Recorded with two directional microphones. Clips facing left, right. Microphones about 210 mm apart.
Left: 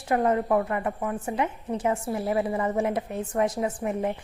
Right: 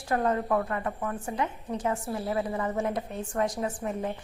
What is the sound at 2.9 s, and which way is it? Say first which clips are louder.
Speech: left 3 dB; 5° left (ahead or behind).